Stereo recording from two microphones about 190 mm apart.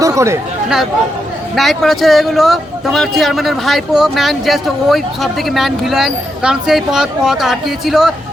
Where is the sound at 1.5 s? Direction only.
Centre (ahead or behind).